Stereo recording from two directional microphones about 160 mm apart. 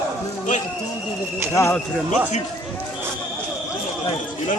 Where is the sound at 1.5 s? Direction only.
15° left (ahead or behind).